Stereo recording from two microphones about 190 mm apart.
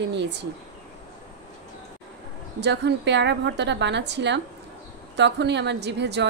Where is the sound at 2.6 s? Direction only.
60° right (ahead or behind).